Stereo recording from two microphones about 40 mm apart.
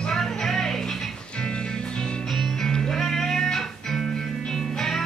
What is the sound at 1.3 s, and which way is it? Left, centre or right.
Music, left.